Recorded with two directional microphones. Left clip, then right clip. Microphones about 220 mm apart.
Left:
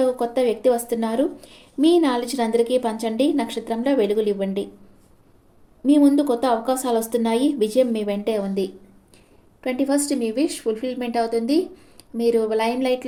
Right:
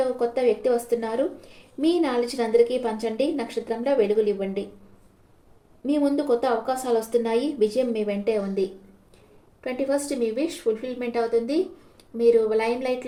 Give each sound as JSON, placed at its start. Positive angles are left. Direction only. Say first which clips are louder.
{"t": 0.2, "sound": "a woman's voice", "louder": "left 1 dB", "side_deg": 45}
{"t": 5.8, "sound": "a woman's voice", "louder": "left 6 dB", "side_deg": 50}